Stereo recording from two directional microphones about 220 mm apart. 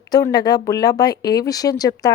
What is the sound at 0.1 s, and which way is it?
A woman's voice, 15° left (ahead or behind).